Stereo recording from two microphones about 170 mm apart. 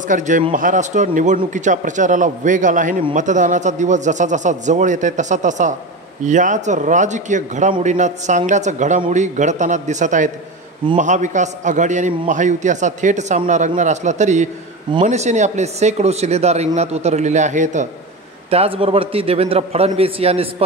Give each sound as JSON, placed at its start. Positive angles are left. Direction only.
{"t": 0.1, "sound": "a man's voice", "side_deg": -50}
{"t": 18.5, "sound": "speech", "side_deg": -35}